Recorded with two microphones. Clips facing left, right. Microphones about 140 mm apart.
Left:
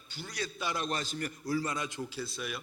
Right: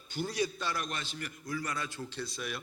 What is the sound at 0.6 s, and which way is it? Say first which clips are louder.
Speech: left 1 dB; 20° left (ahead or behind).